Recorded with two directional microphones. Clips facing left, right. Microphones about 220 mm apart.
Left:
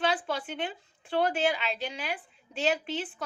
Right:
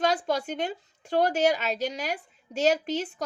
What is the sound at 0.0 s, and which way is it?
A woman's voice, 40° right (ahead or behind).